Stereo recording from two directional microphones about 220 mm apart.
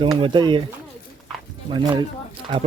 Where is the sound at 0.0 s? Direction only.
20° right (ahead or behind).